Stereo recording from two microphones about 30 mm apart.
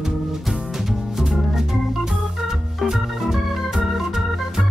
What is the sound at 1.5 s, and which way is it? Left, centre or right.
Organ, centre.